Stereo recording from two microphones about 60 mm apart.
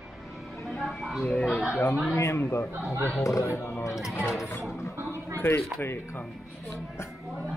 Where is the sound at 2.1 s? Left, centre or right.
Left.